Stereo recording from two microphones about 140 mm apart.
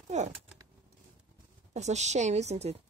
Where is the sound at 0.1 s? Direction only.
55° right (ahead or behind).